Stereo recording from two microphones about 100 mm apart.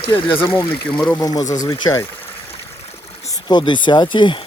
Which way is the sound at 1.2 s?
40° left (ahead or behind).